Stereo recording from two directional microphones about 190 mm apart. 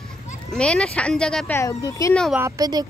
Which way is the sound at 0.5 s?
5° left (ahead or behind).